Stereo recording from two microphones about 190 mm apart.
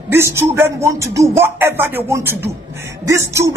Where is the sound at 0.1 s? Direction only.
15° right (ahead or behind).